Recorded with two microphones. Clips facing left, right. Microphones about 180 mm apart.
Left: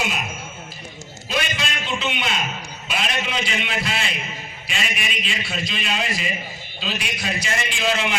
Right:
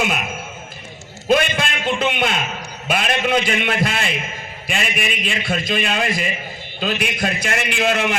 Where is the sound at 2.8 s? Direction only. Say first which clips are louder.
Right 7 dB; 50° right (ahead or behind).